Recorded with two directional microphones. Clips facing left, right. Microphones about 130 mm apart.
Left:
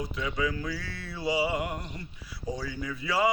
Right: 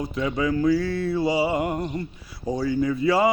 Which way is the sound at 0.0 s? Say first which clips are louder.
Right 6 dB; 40° right (ahead or behind).